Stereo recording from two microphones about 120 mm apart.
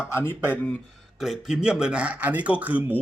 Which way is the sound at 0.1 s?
20° left (ahead or behind).